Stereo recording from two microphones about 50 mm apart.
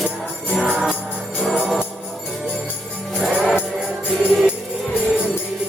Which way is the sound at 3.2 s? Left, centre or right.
Centre.